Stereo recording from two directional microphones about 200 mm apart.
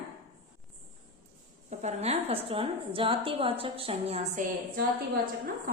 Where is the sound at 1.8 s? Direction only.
35° right (ahead or behind).